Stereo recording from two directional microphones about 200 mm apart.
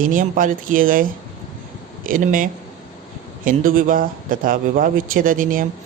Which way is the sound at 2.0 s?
45° right (ahead or behind).